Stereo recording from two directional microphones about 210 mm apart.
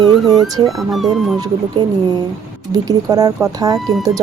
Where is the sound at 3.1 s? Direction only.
15° right (ahead or behind).